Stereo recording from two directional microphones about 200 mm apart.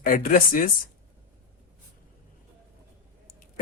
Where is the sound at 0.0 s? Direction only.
45° left (ahead or behind).